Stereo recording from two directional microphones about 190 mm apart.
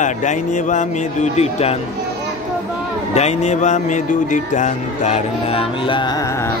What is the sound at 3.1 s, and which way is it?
Speech, 35° left (ahead or behind).